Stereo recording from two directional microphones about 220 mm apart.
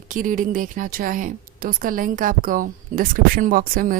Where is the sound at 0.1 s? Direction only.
35° right (ahead or behind).